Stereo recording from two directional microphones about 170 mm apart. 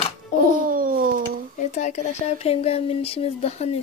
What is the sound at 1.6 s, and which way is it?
Speech, 45° left (ahead or behind).